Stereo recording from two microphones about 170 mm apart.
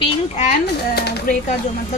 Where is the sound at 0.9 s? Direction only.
70° left (ahead or behind).